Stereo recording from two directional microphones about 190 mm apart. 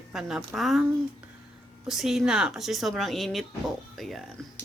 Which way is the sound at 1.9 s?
Centre (ahead or behind).